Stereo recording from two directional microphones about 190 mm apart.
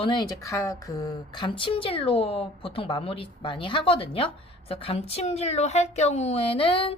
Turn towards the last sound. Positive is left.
turn(degrees=30)  # may be behind; listen again after turning